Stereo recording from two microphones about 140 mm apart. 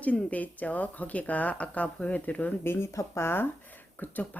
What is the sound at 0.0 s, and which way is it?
Speech, 10° left (ahead or behind).